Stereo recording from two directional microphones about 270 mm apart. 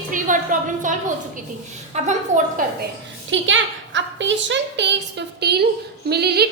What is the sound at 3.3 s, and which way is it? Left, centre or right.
A woman's voice, right.